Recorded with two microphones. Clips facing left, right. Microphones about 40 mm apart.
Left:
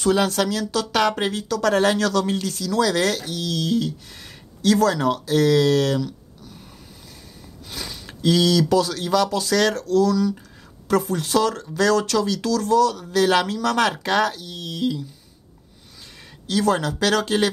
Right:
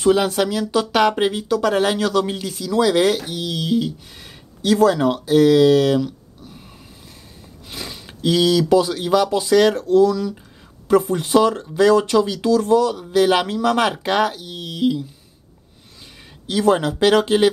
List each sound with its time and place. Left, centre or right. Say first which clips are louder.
0.0 s speech: right 3 dB; centre
16.4 s speech: right 3 dB; right